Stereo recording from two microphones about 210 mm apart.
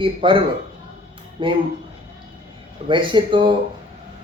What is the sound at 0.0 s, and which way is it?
Speech, 25° right (ahead or behind).